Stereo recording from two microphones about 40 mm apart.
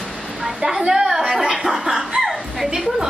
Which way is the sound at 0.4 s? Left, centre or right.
Centre.